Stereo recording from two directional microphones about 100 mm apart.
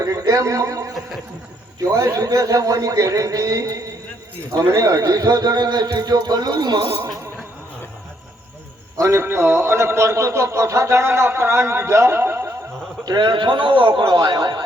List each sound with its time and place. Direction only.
0.0 s a man's voice: 35° right (ahead or behind)
9.0 s a man's voice: 30° right (ahead or behind)
13.1 s a man's voice: 50° right (ahead or behind)